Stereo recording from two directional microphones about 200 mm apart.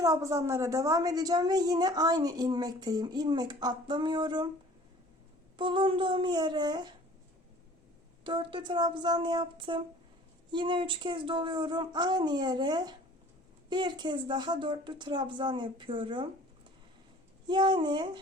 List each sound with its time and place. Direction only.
0.0 s a woman's voice: 15° right (ahead or behind)
5.5 s a woman's voice: 25° right (ahead or behind)
8.2 s a woman's voice: 25° right (ahead or behind)
17.4 s a woman's voice: 25° right (ahead or behind)